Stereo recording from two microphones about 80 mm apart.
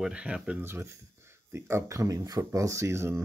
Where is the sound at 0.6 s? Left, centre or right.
Right.